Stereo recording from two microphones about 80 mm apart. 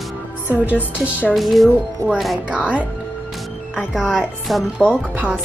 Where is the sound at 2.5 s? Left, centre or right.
Centre.